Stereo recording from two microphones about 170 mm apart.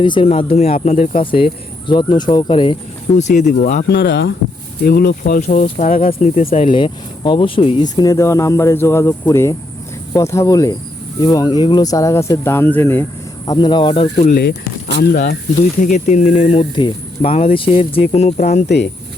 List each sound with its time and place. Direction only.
0.0 s speech: 30° left (ahead or behind); by 1.2 s 45° left (ahead or behind)
1.2 s speech: 30° left (ahead or behind)
3.2 s speech: 45° left (ahead or behind)
3.8 s speech: 90° left
4.8 s speech: 65° left (ahead or behind)
5.4 s speech: 40° left (ahead or behind)
6.1 s speech: 40° left (ahead or behind); by 13.1 s 15° left (ahead or behind)
13.5 s speech: 25° left (ahead or behind)
14.2 s speech: 50° left (ahead or behind)
14.9 s speech: 60° left (ahead or behind)
15.8 s speech: 45° left (ahead or behind)